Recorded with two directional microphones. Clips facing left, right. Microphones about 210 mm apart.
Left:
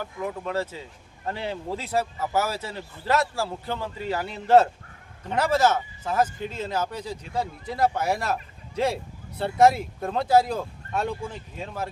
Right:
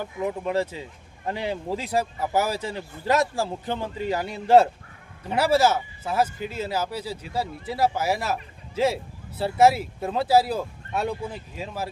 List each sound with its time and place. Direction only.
0.0 s speech: 20° right (ahead or behind)